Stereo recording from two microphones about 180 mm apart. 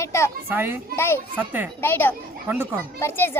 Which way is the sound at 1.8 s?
10° left (ahead or behind).